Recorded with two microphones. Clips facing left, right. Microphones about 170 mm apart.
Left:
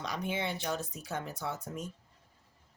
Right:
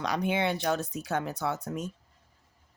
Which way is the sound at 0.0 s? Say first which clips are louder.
Right 7 dB; 75° right (ahead or behind).